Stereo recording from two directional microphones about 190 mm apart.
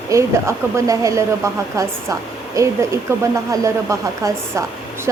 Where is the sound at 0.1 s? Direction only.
15° right (ahead or behind).